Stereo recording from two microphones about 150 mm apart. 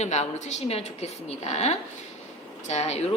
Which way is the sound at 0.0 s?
50° left (ahead or behind).